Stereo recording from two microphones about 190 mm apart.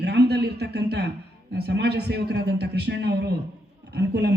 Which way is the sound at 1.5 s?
60° right (ahead or behind).